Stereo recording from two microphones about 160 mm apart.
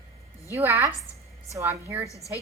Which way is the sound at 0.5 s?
15° right (ahead or behind).